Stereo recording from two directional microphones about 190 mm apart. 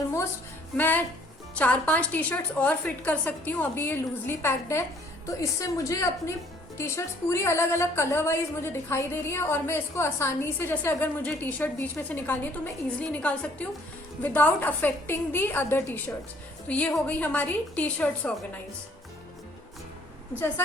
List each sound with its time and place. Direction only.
0.8 s a woman's voice: 10° left (ahead or behind)